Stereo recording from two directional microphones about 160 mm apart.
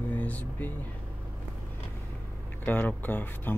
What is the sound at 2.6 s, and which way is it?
Speech, 10° left (ahead or behind).